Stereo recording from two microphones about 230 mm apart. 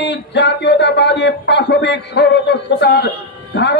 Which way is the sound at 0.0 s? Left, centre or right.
Left.